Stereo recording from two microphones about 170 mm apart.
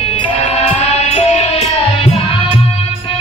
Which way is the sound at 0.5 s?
40° left (ahead or behind).